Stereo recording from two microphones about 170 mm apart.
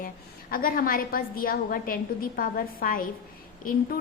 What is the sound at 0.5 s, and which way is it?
A woman's voice, 60° left (ahead or behind).